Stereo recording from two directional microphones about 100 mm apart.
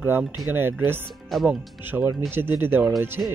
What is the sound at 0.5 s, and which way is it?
Speech, 20° right (ahead or behind).